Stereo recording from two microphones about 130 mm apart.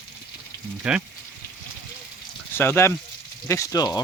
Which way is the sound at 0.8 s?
5° right (ahead or behind).